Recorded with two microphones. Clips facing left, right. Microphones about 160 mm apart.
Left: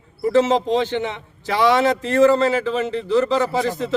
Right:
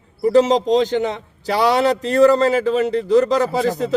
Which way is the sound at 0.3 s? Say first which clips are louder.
Right 3 dB; 40° right (ahead or behind).